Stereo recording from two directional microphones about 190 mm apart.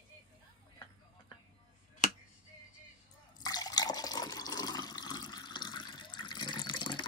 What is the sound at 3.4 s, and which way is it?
Water, 20° left (ahead or behind).